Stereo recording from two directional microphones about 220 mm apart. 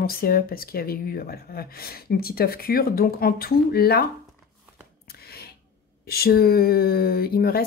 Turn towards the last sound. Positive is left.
turn(degrees=45)  # may be behind; listen again after turning